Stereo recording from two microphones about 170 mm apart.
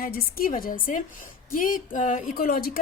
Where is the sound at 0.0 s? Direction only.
60° left (ahead or behind).